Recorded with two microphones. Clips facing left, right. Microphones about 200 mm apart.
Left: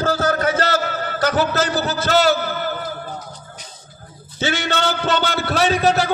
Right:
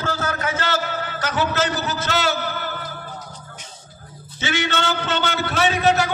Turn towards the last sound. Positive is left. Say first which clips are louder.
# left 2 dB
turn(degrees=35)  # may be behind; listen again after turning